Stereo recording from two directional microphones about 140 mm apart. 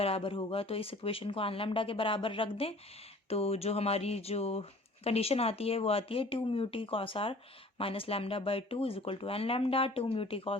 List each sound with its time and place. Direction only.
0.0 s speech: 40° left (ahead or behind)